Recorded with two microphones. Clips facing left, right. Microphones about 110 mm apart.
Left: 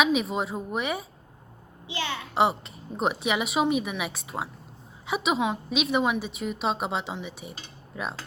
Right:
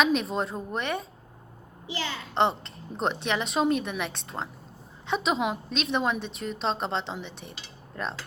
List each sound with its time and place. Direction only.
0.0 s a woman's voice: 5° left (ahead or behind)
2.3 s a woman's voice: 5° left (ahead or behind)